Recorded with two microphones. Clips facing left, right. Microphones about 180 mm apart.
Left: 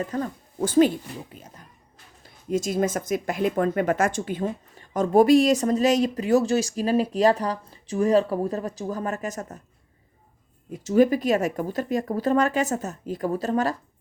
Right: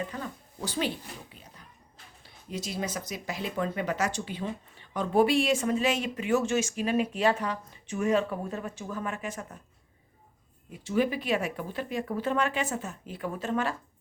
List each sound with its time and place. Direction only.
0.0 s speech: 45° left (ahead or behind)
10.7 s speech: 40° left (ahead or behind)